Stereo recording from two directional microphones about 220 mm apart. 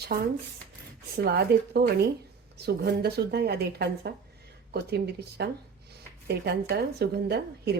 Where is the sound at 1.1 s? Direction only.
45° right (ahead or behind).